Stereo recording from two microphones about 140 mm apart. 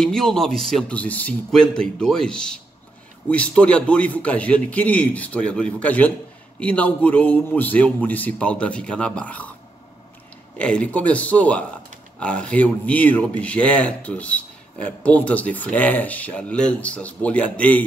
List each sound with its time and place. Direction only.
0.0 s a man's voice: 5° left (ahead or behind)
10.6 s speech: 10° left (ahead or behind)